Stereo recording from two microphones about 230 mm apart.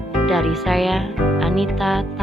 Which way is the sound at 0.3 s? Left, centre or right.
Centre.